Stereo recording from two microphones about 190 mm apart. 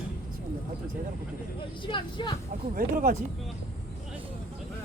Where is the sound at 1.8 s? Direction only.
25° left (ahead or behind).